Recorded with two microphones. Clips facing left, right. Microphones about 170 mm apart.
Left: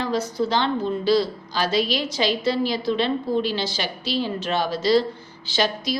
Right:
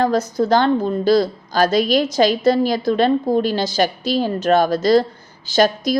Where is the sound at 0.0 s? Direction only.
45° right (ahead or behind).